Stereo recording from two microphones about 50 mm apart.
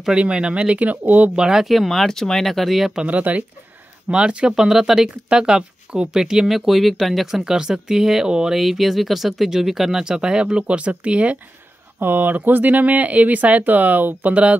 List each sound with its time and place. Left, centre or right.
0.2 s speech: right
1.3 s speech: centre
3.1 s speech: right
4.6 s speech: centre
8.5 s speech: centre; by 11.3 s right
12.0 s speech: right